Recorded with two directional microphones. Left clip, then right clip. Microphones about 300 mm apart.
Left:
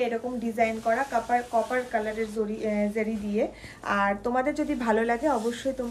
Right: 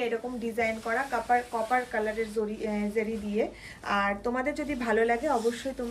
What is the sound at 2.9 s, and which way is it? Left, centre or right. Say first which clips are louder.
A woman's voice: left 1 dB; centre.